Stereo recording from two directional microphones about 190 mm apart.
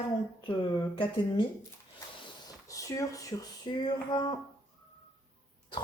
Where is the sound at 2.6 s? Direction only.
15° left (ahead or behind).